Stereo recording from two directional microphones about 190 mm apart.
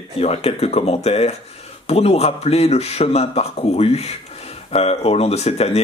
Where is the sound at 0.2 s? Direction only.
35° left (ahead or behind).